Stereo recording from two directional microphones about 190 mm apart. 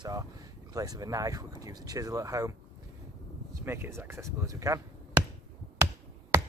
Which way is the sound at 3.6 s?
10° right (ahead or behind).